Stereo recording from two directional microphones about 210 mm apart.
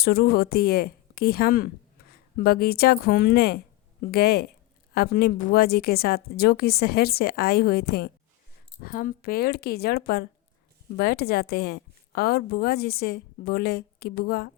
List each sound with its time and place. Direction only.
0.0 s a woman's voice: 45° left (ahead or behind)